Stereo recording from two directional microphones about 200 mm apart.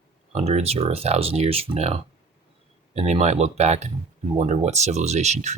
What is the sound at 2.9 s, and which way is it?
Speech, 30° right (ahead or behind).